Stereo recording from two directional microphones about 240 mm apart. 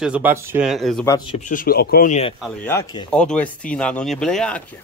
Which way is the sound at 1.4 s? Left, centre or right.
Left.